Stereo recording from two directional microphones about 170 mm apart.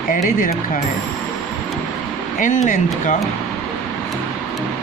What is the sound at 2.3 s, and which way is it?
Speech, 50° left (ahead or behind).